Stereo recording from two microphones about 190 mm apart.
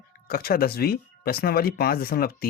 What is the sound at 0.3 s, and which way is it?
Speech, 50° left (ahead or behind).